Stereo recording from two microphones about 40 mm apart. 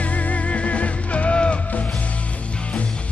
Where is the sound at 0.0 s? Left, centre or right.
Left.